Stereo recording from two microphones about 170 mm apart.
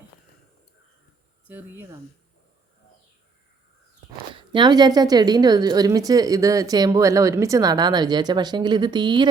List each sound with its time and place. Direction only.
1.5 s speech: 10° right (ahead or behind)
4.5 s a woman's voice: 25° right (ahead or behind)